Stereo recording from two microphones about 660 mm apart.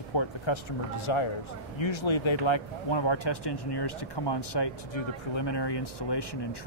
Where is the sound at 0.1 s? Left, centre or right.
Left.